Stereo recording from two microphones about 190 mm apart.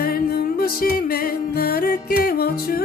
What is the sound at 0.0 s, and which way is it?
Music, 50° left (ahead or behind).